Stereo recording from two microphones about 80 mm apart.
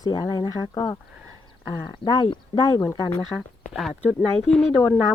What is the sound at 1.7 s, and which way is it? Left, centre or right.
Speech, left.